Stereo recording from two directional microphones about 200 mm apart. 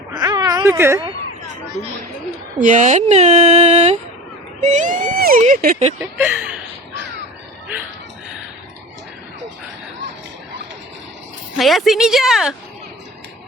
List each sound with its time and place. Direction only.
0.2 s a sound: 15° right (ahead or behind)
2.6 s speech: 40° right (ahead or behind)
6.0 s speech: 10° right (ahead or behind)
11.5 s speech: centre (ahead or behind)